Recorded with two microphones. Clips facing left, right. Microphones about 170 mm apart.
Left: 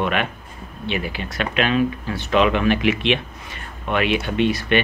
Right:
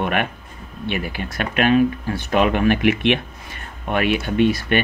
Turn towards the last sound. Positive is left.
turn(degrees=-45)  # may be behind; listen again after turning